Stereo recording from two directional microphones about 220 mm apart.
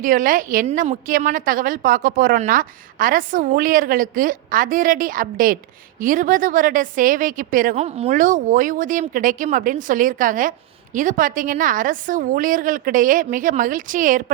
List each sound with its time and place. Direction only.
0.0 s a woman's voice: 40° right (ahead or behind)